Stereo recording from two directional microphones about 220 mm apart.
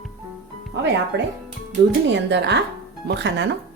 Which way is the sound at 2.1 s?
50° right (ahead or behind).